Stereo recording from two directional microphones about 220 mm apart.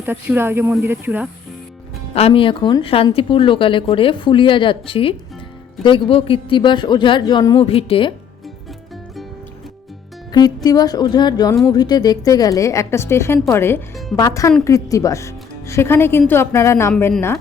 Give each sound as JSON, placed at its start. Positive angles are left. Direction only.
{"t": 0.0, "sound": "speech", "side_deg": -10}
{"t": 2.1, "sound": "speech", "side_deg": 25}
{"t": 10.3, "sound": "speech", "side_deg": 15}